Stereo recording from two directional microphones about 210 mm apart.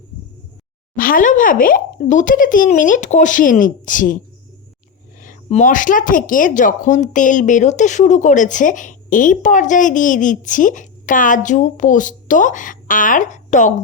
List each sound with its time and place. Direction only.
0.9 s speech: 40° left (ahead or behind)
5.2 s speech: 35° left (ahead or behind)